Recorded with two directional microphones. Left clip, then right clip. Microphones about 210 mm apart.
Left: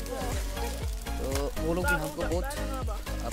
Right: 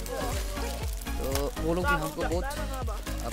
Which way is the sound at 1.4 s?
5° right (ahead or behind).